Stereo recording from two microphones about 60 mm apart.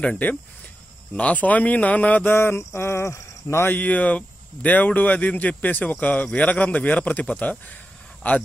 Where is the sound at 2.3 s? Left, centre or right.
Left.